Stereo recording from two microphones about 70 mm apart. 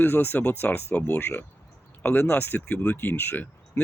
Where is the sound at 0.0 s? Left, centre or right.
Left.